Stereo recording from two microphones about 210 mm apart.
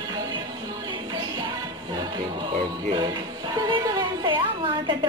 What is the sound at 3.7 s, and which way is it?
Music, 25° right (ahead or behind).